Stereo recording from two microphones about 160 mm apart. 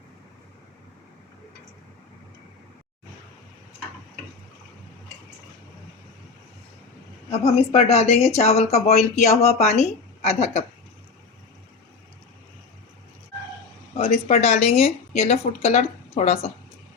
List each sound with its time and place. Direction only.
7.3 s a woman's voice: 40° left (ahead or behind)
14.3 s speech: 40° left (ahead or behind)